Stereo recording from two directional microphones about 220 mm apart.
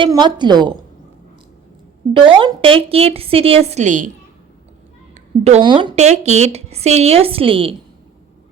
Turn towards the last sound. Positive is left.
turn(degrees=-25)  # may be behind; listen again after turning